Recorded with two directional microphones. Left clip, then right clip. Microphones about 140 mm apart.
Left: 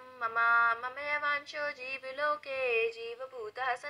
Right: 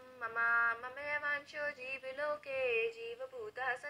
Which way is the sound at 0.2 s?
20° left (ahead or behind).